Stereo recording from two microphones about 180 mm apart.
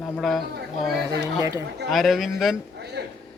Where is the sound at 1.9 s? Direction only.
Centre (ahead or behind).